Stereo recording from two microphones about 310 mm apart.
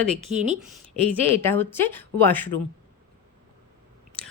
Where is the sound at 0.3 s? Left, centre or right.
Right.